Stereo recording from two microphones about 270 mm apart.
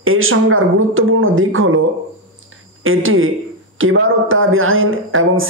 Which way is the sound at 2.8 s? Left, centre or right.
Right.